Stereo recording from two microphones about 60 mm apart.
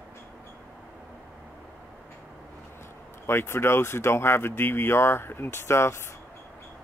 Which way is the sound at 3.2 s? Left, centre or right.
Left.